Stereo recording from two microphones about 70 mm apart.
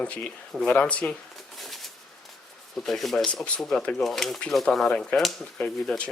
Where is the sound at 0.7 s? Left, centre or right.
Centre.